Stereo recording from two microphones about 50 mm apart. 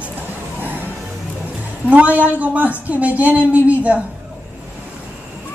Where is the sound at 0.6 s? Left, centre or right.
Right.